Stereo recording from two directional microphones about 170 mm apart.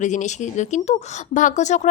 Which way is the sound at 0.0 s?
45° left (ahead or behind).